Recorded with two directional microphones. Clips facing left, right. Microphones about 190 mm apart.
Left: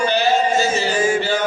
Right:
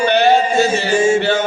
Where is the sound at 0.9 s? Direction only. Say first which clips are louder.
Right 7 dB; 25° right (ahead or behind).